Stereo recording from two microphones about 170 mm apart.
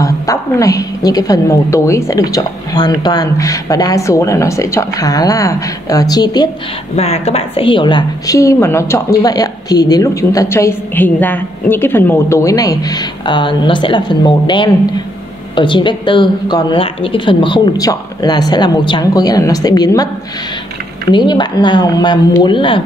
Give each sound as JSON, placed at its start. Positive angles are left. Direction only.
{"t": 0.0, "sound": "a woman's voice", "side_deg": 20}
{"t": 7.0, "sound": "a woman's voice", "side_deg": 40}
{"t": 21.1, "sound": "a woman's voice", "side_deg": 25}